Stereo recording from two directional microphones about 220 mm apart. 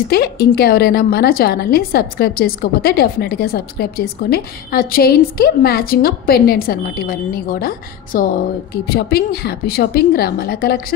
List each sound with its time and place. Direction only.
0.1 s a woman's voice: 45° left (ahead or behind)